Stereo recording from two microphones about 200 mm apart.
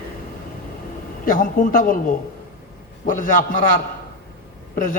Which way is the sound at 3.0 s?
40° left (ahead or behind).